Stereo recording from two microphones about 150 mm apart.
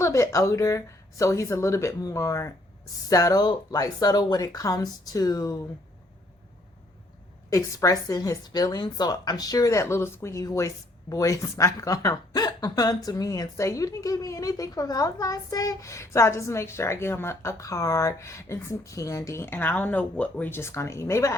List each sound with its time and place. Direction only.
0.0 s a woman's voice: 20° left (ahead or behind)
7.5 s a woman's voice: 20° left (ahead or behind)